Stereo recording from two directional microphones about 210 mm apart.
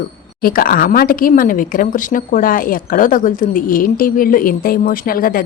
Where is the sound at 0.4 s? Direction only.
45° left (ahead or behind).